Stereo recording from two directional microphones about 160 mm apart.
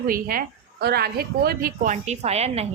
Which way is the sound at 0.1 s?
65° right (ahead or behind).